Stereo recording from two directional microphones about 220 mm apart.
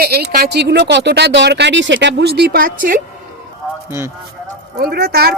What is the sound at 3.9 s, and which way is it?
Speech, 10° right (ahead or behind).